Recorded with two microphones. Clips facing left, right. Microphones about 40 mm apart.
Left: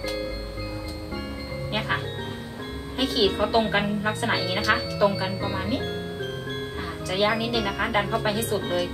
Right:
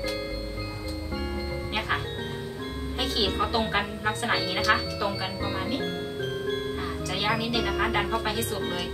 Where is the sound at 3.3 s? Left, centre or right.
Centre.